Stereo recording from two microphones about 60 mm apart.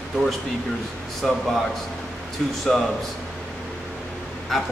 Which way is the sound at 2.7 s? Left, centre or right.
Centre.